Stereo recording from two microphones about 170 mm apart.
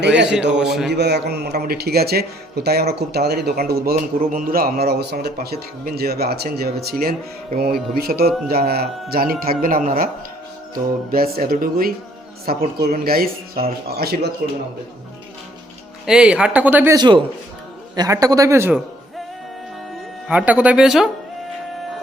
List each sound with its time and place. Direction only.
0.0 s a man's voice: 90° right
0.5 s speech: 5° right (ahead or behind)
0.9 s a man's voice: 80° right; by 9.9 s 55° right (ahead or behind)
11.1 s speech: 60° right (ahead or behind)
16.0 s a man's voice: 5° right (ahead or behind)
20.2 s speech: 10° right (ahead or behind)